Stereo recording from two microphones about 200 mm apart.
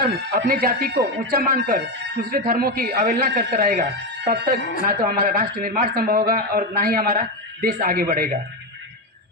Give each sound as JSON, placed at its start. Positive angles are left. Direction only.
{"t": 0.0, "sound": "a man's voice", "side_deg": -50}